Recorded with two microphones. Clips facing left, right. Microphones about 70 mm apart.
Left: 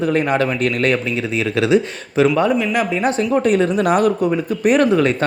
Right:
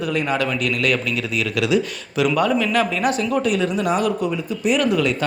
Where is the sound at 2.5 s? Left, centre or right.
Centre; by 3.8 s left.